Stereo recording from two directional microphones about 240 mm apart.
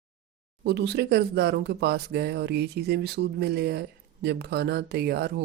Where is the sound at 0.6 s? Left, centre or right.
Right.